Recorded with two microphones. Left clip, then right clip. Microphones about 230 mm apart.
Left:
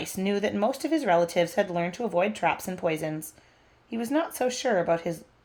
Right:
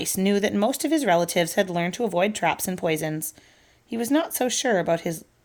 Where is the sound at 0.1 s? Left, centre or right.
Right.